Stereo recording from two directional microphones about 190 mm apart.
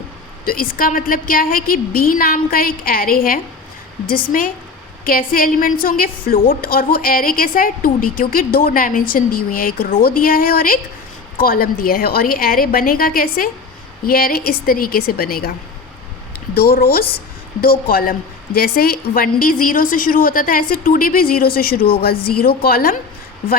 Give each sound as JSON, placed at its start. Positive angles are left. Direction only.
{"t": 0.4, "sound": "a woman's voice", "side_deg": 50}
{"t": 16.6, "sound": "a woman's voice", "side_deg": 50}